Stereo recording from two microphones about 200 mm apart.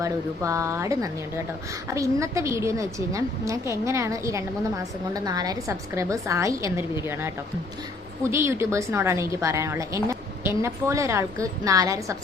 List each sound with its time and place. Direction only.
0.0 s a woman's voice: 15° right (ahead or behind)
8.2 s a woman's voice: 15° right (ahead or behind)